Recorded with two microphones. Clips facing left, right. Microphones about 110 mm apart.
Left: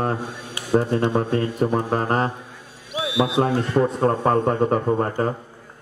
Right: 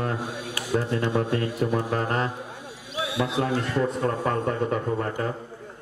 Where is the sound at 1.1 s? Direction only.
40° left (ahead or behind).